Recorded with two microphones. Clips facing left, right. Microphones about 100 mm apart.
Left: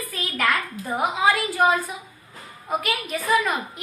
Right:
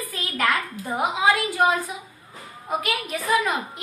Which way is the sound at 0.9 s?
20° right (ahead or behind).